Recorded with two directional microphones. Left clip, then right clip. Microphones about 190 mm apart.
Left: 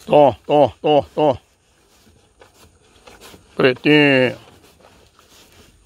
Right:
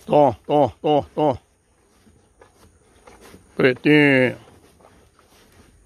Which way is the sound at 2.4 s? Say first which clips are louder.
Left 3 dB; 45° left (ahead or behind).